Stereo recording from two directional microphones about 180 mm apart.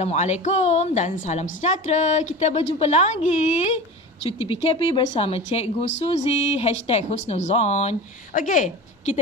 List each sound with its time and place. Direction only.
0.0 s a woman's voice: 40° left (ahead or behind)